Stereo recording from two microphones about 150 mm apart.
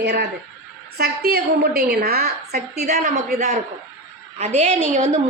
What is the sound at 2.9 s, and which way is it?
Speech, 75° right (ahead or behind).